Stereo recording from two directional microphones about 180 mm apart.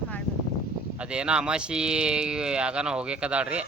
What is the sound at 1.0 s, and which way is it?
Speech, 5° right (ahead or behind).